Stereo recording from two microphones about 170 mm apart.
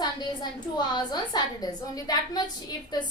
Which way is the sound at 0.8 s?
25° left (ahead or behind).